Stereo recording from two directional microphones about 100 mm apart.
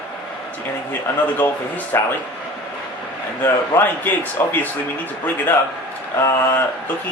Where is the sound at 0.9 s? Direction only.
15° left (ahead or behind).